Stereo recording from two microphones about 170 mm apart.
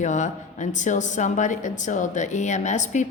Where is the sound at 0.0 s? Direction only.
45° left (ahead or behind).